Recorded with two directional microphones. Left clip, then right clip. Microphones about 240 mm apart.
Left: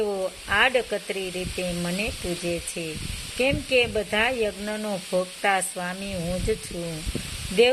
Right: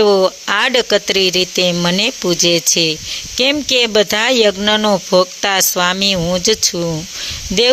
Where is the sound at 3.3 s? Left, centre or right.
Right.